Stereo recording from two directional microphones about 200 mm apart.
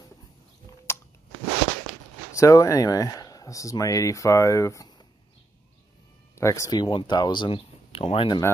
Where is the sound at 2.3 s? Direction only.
15° left (ahead or behind).